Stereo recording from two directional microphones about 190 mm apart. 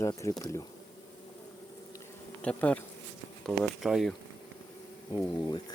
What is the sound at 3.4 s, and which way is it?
Speech, centre (ahead or behind).